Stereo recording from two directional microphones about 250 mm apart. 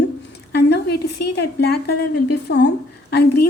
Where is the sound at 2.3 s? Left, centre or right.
Left.